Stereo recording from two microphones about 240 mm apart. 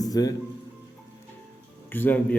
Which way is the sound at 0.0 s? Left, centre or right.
Centre.